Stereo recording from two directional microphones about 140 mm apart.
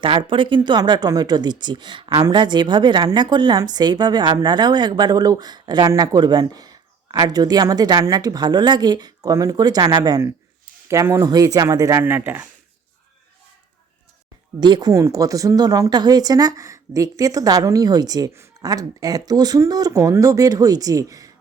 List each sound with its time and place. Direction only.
0.0 s speech: 40° right (ahead or behind); by 12.5 s 15° right (ahead or behind)
14.6 s speech: 30° right (ahead or behind)